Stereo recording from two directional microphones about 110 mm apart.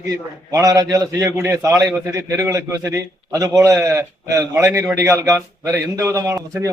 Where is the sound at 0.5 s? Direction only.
30° right (ahead or behind).